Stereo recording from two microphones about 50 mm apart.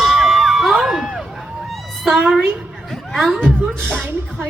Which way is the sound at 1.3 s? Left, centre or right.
Centre.